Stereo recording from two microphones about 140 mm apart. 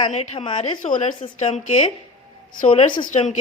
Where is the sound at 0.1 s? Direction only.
45° left (ahead or behind).